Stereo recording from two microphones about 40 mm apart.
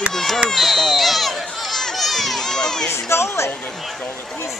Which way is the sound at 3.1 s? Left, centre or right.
Left.